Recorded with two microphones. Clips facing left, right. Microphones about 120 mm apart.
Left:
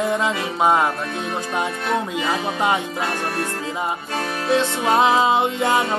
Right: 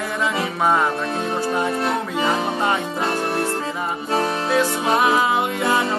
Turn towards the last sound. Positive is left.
turn(degrees=25)  # may be behind; listen again after turning